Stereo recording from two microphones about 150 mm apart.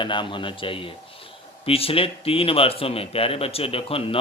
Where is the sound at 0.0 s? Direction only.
35° left (ahead or behind).